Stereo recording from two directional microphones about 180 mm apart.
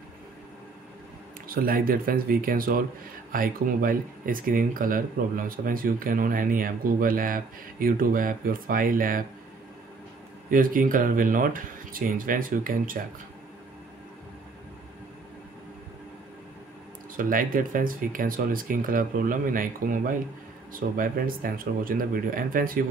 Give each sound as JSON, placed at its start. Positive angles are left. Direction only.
{"t": 1.5, "sound": "speech", "side_deg": -55}
{"t": 10.5, "sound": "speech", "side_deg": -50}
{"t": 17.2, "sound": "speech", "side_deg": -50}